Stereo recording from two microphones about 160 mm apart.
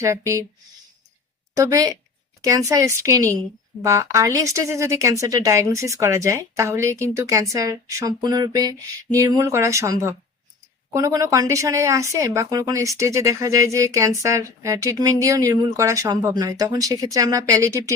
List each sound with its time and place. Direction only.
0.0 s speech: 20° right (ahead or behind)
1.5 s speech: 20° right (ahead or behind)